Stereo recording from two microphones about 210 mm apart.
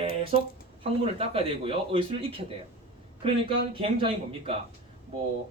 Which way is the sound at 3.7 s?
25° right (ahead or behind).